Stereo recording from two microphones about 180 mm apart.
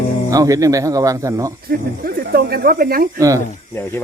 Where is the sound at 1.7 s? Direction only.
60° right (ahead or behind).